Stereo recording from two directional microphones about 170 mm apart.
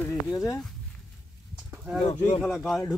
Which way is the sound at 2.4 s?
5° left (ahead or behind).